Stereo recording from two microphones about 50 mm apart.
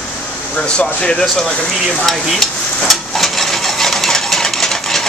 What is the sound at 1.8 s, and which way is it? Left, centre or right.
Stir, centre.